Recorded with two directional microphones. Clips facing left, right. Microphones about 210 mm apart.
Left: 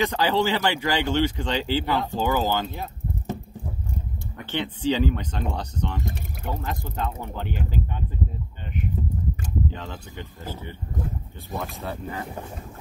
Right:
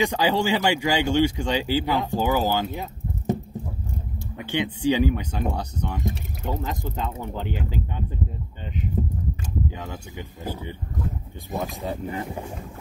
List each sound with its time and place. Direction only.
0.0 s a man's voice: 15° right (ahead or behind)
4.4 s a man's voice: 15° right (ahead or behind)
9.7 s a man's voice: 10° right (ahead or behind)